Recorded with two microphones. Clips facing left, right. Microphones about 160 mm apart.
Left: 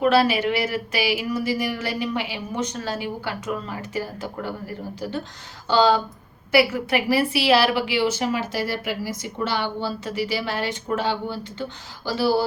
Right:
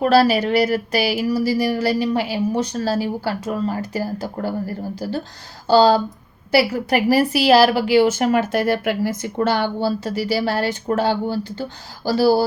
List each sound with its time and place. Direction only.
0.0 s a woman's voice: 40° right (ahead or behind)
5.6 s a woman's voice: 35° right (ahead or behind)